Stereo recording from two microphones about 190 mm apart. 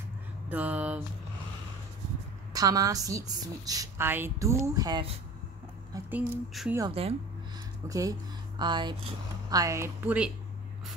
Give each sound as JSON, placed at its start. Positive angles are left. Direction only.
{"t": 0.5, "sound": "a woman's voice", "side_deg": -10}
{"t": 2.5, "sound": "a woman's voice", "side_deg": -20}
{"t": 5.9, "sound": "a woman's voice", "side_deg": -10}
{"t": 6.9, "sound": "speech", "side_deg": -30}
{"t": 7.9, "sound": "a woman's voice", "side_deg": -20}